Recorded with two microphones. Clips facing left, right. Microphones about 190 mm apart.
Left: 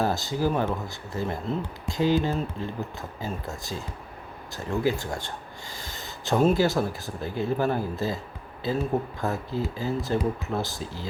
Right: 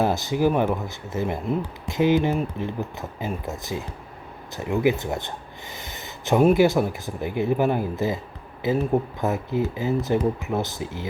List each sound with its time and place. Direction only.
0.0 s speech: 20° right (ahead or behind)